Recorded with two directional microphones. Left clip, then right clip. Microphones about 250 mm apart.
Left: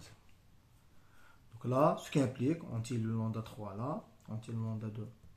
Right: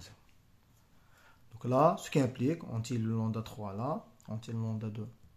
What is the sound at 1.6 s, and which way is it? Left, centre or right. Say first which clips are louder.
Speech: right 3 dB; right.